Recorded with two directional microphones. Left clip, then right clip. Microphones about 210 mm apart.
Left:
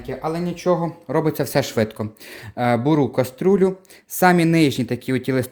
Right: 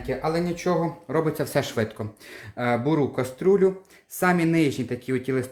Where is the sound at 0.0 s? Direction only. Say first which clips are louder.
Even; 25° left (ahead or behind).